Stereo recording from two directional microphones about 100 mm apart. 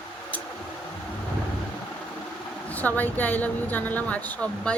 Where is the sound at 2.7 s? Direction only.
15° left (ahead or behind).